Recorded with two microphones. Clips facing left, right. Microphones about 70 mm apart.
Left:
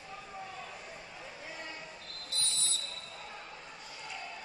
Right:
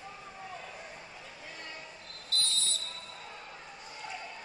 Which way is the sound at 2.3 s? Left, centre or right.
Left.